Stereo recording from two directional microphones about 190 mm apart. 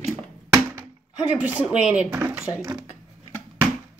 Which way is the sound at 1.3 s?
5° right (ahead or behind).